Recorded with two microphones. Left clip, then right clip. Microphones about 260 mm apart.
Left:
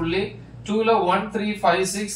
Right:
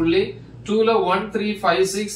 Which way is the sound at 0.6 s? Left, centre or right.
Centre.